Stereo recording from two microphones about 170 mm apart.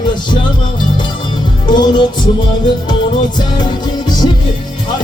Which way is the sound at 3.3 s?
25° left (ahead or behind).